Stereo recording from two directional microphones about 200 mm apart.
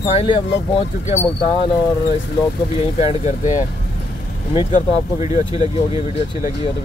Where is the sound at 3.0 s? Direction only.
35° left (ahead or behind).